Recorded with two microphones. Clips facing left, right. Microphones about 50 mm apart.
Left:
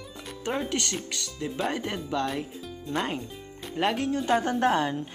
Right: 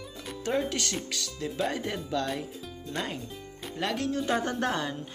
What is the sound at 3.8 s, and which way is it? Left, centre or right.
Speech, left.